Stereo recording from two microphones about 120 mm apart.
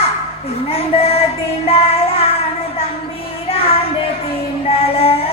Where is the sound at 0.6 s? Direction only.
55° left (ahead or behind).